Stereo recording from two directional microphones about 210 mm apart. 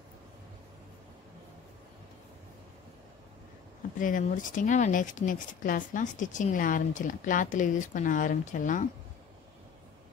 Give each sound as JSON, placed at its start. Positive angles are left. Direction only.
{"t": 4.0, "sound": "speech", "side_deg": 40}